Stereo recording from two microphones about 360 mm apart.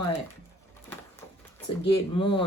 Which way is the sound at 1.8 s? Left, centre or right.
Centre.